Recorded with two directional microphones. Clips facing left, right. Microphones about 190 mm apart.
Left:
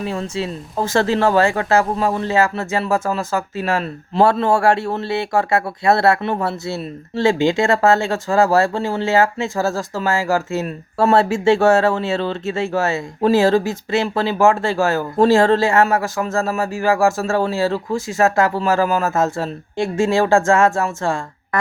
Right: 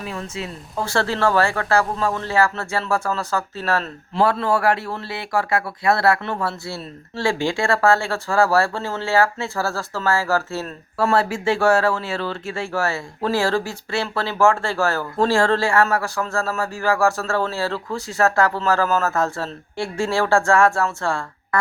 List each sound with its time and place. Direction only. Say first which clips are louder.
0.0 s speech: left 6 dB; 30° left (ahead or behind)
4.2 s a man's voice: left 4 dB; 25° left (ahead or behind)